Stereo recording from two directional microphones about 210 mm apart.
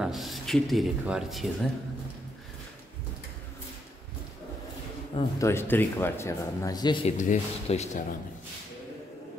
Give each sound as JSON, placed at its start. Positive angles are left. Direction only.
{"t": 0.0, "sound": "speech", "side_deg": 0}
{"t": 5.1, "sound": "speech", "side_deg": 15}
{"t": 7.1, "sound": "speech", "side_deg": 35}